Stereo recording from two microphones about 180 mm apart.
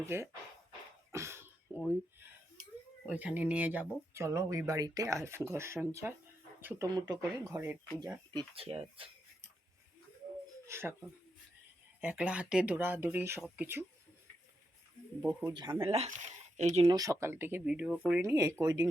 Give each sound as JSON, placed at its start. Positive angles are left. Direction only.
{"t": 0.0, "sound": "speech", "side_deg": -15}
{"t": 1.1, "sound": "cough", "side_deg": -15}
{"t": 3.1, "sound": "speech", "side_deg": -10}
{"t": 6.9, "sound": "speech", "side_deg": -20}
{"t": 8.4, "sound": "speech", "side_deg": -30}
{"t": 10.7, "sound": "speech", "side_deg": -15}
{"t": 11.9, "sound": "speech", "side_deg": -5}
{"t": 15.2, "sound": "speech", "side_deg": -10}
{"t": 15.5, "sound": "speech", "side_deg": -25}
{"t": 16.8, "sound": "speech", "side_deg": -20}